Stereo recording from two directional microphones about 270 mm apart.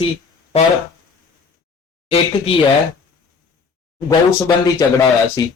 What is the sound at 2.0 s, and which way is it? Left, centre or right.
Speech, left.